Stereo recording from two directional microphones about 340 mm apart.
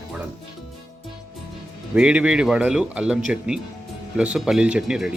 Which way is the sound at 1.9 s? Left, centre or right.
Centre.